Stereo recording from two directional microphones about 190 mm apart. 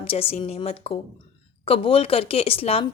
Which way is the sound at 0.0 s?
30° left (ahead or behind).